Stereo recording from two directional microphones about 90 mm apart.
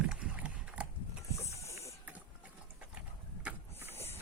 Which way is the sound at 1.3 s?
35° left (ahead or behind).